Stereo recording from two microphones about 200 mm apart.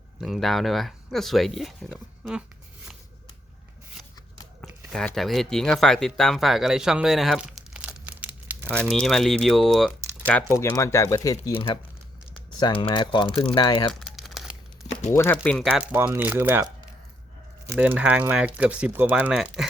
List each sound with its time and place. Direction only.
0.2 s speech: centre (ahead or behind)
4.6 s speech: centre (ahead or behind)
8.7 s speech: 5° left (ahead or behind)
12.5 s speech: 25° left (ahead or behind)
14.0 s crumpling: centre (ahead or behind)
15.1 s speech: 10° left (ahead or behind)
15.7 s speech: 10° right (ahead or behind)
17.7 s speech: 10° right (ahead or behind)